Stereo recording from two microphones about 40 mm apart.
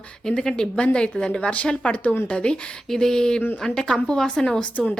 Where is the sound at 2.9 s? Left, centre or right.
Centre.